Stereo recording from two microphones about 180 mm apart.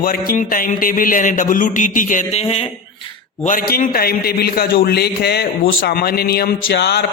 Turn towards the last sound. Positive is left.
turn(degrees=65)  # may be behind; listen again after turning